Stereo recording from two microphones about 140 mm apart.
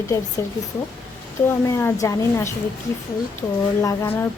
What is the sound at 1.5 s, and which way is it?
A woman's voice, 20° left (ahead or behind).